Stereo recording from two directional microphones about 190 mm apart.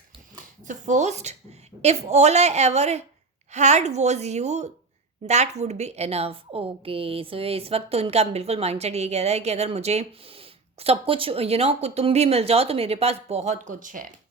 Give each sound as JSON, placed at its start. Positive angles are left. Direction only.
{"t": 0.6, "sound": "a woman's voice", "side_deg": -40}